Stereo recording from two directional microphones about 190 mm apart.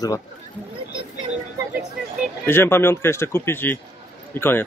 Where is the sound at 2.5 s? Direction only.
10° left (ahead or behind).